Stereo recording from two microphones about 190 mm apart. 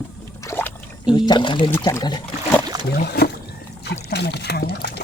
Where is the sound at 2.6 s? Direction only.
20° right (ahead or behind).